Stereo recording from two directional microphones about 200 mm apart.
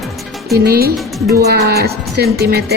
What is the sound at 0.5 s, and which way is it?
Music, 50° right (ahead or behind).